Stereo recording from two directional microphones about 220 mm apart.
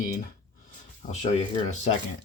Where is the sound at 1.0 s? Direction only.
35° left (ahead or behind).